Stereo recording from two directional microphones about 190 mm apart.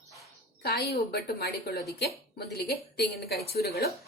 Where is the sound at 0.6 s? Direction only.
55° left (ahead or behind).